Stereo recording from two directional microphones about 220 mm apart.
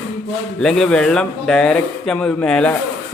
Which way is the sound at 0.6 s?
Centre (ahead or behind).